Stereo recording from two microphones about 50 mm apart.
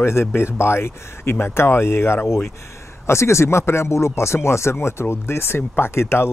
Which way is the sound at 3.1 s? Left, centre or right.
Left.